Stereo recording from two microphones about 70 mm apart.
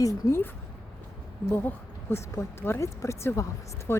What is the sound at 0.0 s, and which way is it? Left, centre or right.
Speech, left.